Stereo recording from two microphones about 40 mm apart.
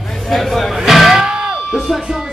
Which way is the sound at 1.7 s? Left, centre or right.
Centre.